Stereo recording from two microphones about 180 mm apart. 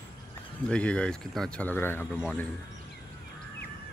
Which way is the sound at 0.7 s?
5° left (ahead or behind).